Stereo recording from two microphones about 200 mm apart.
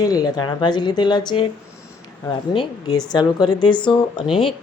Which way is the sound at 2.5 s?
25° left (ahead or behind).